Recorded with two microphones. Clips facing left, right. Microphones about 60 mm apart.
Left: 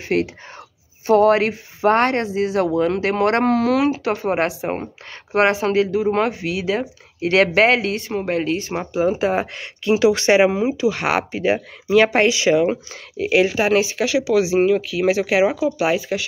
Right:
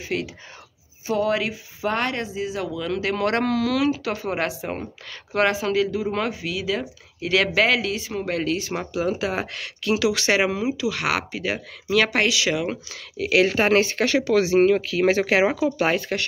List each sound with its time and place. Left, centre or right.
0.1 s speech: left
2.2 s speech: left; by 13.5 s centre
13.5 s speech: centre